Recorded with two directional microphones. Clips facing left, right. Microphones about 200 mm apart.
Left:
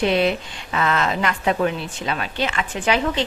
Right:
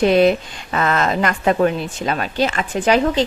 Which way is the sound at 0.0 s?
45° right (ahead or behind).